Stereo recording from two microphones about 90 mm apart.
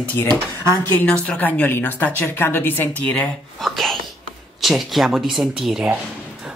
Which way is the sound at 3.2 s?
Centre (ahead or behind).